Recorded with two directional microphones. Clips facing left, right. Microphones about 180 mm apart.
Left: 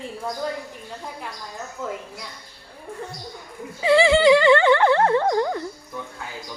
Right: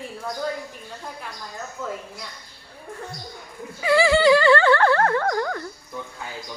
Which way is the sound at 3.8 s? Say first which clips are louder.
Left 2 dB; 25° left (ahead or behind).